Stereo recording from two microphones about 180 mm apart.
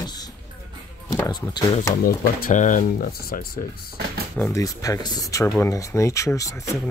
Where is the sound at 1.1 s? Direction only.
20° left (ahead or behind).